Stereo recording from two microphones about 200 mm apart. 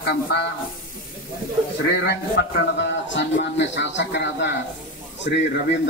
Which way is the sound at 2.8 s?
65° left (ahead or behind).